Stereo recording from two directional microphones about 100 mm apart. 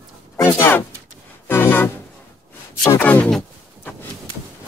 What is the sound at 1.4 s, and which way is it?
Organ, 25° left (ahead or behind).